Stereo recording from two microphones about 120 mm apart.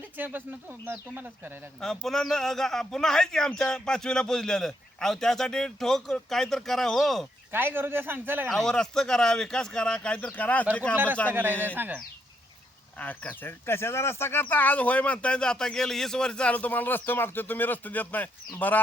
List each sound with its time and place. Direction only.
0.0 s speech: 15° right (ahead or behind)
1.8 s a man's voice: 5° left (ahead or behind)
7.5 s speech: 15° right (ahead or behind)
8.4 s speech: 5° left (ahead or behind)
10.9 s speech: 20° right (ahead or behind)
13.0 s speech: 10° left (ahead or behind)